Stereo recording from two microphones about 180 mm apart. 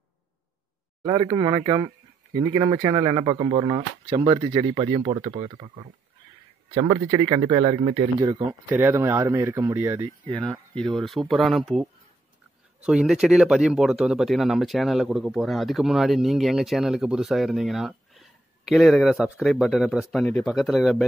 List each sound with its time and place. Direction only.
1.0 s speech: 20° right (ahead or behind)
10.4 s speech: 5° left (ahead or behind)
12.8 s speech: 5° right (ahead or behind)